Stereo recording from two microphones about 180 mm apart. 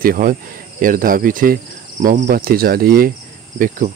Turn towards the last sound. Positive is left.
turn(degrees=-50)  # may be behind; listen again after turning